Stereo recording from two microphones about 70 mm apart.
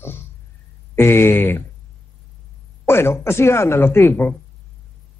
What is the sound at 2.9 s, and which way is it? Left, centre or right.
Speech, left.